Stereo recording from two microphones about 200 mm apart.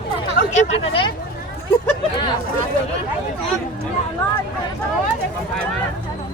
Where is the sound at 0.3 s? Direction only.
35° left (ahead or behind).